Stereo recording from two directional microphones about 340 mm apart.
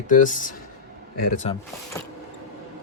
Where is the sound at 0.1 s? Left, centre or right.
Left.